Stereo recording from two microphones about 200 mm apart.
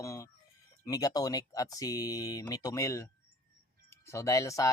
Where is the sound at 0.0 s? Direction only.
15° left (ahead or behind).